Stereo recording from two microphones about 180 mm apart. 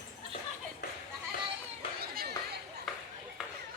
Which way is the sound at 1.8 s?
30° left (ahead or behind).